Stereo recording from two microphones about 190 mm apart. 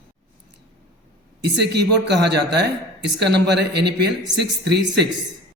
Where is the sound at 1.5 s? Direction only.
60° right (ahead or behind).